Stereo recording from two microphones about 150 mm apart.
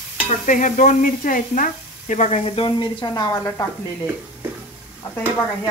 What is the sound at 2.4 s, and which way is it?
Speech, 35° left (ahead or behind).